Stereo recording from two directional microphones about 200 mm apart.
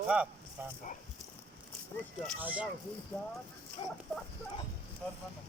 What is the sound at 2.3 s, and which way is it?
Speech, 5° right (ahead or behind).